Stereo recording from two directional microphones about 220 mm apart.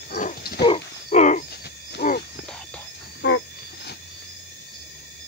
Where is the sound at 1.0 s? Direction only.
35° left (ahead or behind).